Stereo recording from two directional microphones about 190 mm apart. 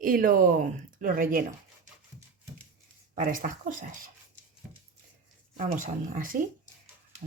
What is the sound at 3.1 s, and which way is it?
Speech, 45° right (ahead or behind).